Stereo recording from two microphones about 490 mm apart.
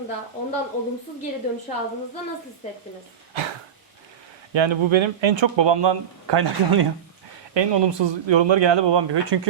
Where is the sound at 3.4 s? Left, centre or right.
Right.